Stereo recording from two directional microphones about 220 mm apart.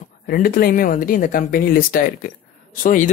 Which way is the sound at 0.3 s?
40° left (ahead or behind).